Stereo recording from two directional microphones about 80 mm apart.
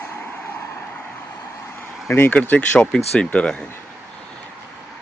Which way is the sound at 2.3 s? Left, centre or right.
Centre.